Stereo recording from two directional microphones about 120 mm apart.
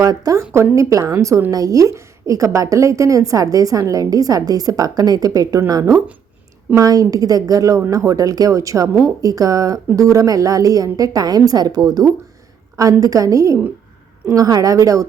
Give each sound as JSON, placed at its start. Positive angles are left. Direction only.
{"t": 0.0, "sound": "a woman's voice", "side_deg": -30}